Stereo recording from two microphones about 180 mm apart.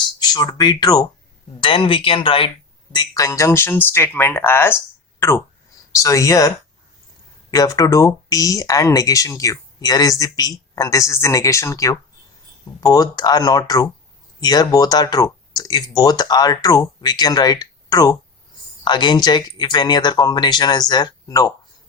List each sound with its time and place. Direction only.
0.2 s speech: 20° left (ahead or behind)
6.0 s speech: 20° left (ahead or behind)
7.5 s speech: 20° left (ahead or behind)